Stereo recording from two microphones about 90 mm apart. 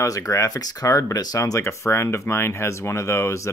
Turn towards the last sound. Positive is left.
turn(degrees=35)  # may be behind; listen again after turning